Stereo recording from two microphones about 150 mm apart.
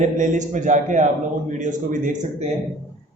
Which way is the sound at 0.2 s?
55° right (ahead or behind).